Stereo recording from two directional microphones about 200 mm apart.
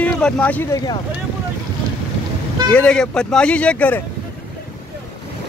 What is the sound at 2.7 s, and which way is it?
Speech, 5° left (ahead or behind).